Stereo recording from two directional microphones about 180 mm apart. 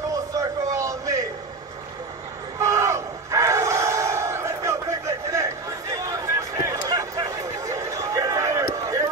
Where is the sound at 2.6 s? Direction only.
15° right (ahead or behind).